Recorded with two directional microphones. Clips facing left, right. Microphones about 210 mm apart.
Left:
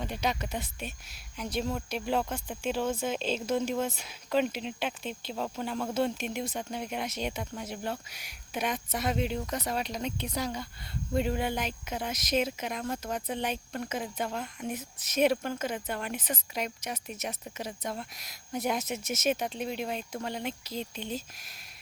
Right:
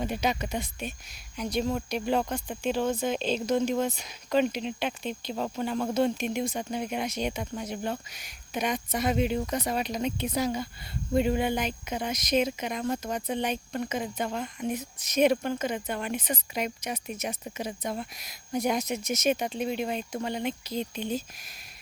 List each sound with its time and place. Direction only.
0.0 s speech: 5° right (ahead or behind)